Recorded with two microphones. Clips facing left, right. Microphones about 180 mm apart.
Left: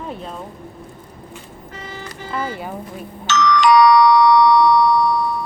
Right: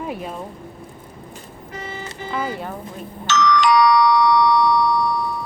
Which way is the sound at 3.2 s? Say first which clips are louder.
Left 2 dB; 65° left (ahead or behind).